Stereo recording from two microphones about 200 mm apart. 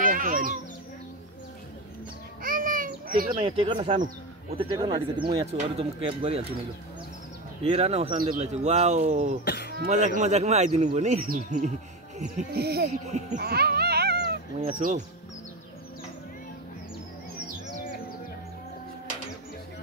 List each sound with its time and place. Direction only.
0.0 s music: 45° right (ahead or behind)
2.4 s a sound: 45° right (ahead or behind)
3.3 s speech: 25° right (ahead or behind)
4.7 s speech: 20° right (ahead or behind)
7.6 s speech: 30° right (ahead or behind)
9.4 s speech: 55° left (ahead or behind)
9.8 s speech: 35° right (ahead or behind)
12.5 s speech: 55° right (ahead or behind)
13.0 s speech: 35° right (ahead or behind)
13.4 s cat: 50° right (ahead or behind)
14.8 s speech: 35° right (ahead or behind)
17.8 s music: 50° left (ahead or behind)